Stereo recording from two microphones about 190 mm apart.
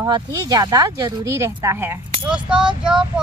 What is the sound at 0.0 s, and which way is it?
A child's voice, 20° right (ahead or behind).